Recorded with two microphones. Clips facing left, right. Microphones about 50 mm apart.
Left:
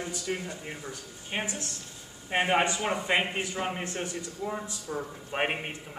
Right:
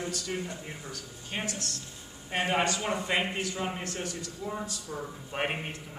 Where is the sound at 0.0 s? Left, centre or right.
Centre.